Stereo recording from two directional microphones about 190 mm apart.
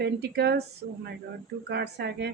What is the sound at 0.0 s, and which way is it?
A woman's voice, 60° right (ahead or behind).